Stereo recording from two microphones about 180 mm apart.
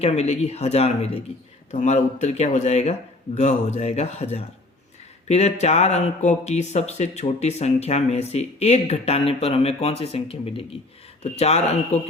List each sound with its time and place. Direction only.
0.0 s speech: 35° left (ahead or behind)